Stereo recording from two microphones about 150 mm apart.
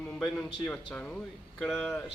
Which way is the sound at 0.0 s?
10° left (ahead or behind).